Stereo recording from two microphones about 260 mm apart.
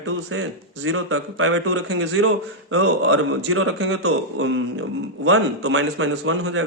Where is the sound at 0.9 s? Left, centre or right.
Right.